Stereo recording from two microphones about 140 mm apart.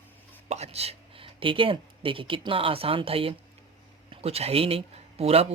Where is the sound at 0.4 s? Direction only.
50° right (ahead or behind).